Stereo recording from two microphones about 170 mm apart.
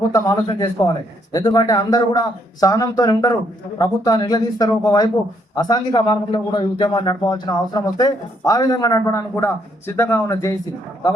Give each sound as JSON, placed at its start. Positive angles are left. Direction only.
{"t": 0.1, "sound": "a man's voice", "side_deg": 25}